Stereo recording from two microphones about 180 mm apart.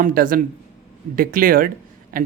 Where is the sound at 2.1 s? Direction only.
50° right (ahead or behind).